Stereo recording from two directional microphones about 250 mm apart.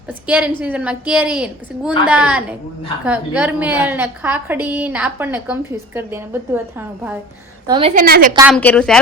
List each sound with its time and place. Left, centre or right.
0.1 s a woman's voice: centre
7.7 s a woman's voice: right
7.9 s a woman's voice: right
8.4 s a woman's voice: centre